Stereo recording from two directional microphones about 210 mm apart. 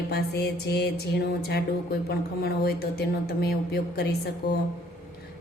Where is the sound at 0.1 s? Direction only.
50° left (ahead or behind).